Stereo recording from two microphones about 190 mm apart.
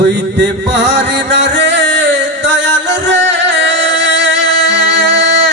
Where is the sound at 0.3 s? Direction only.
70° right (ahead or behind).